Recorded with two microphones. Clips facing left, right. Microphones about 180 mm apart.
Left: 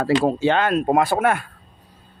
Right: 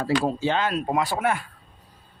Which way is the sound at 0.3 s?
65° left (ahead or behind).